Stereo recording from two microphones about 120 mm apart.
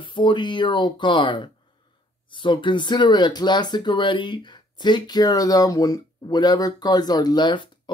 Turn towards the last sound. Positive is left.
turn(degrees=40)  # may be behind; listen again after turning